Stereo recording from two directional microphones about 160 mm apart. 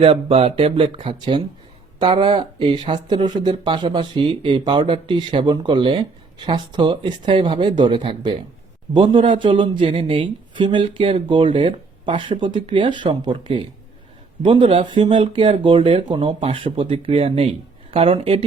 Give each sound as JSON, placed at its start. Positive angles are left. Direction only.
{"t": 0.0, "sound": "speech", "side_deg": -35}